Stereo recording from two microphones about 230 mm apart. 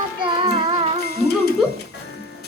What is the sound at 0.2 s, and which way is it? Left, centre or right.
Child singing, right.